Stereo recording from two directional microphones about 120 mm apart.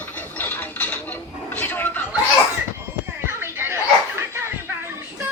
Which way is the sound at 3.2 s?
20° right (ahead or behind).